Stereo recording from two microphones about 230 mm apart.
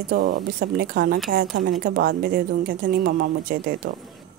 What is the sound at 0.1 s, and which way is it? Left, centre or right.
A woman's voice, right.